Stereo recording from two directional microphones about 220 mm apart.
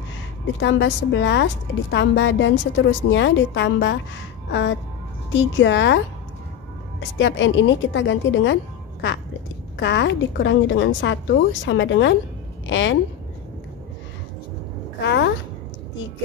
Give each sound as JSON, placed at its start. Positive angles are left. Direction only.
{"t": 0.6, "sound": "a woman's voice", "side_deg": 55}
{"t": 4.5, "sound": "music", "side_deg": 55}
{"t": 5.3, "sound": "speech", "side_deg": 55}
{"t": 7.2, "sound": "speech", "side_deg": 55}
{"t": 9.8, "sound": "speech", "side_deg": 55}
{"t": 15.0, "sound": "a sound", "side_deg": 55}